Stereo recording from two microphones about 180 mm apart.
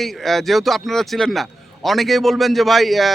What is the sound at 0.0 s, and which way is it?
A man's voice, centre (ahead or behind).